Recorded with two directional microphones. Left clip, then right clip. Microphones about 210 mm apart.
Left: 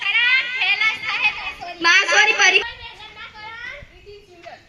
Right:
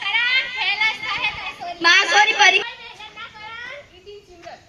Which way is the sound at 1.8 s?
75° right (ahead or behind).